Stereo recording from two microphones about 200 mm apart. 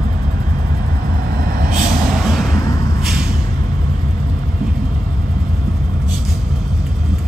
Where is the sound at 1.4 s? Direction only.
50° right (ahead or behind).